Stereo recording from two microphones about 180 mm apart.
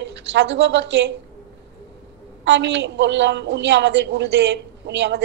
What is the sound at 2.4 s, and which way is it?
A man's voice, 80° right.